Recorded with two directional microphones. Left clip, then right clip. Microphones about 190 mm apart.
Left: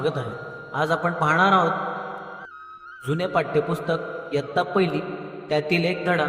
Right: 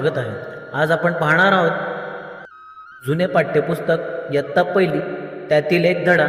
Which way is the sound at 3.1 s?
5° right (ahead or behind).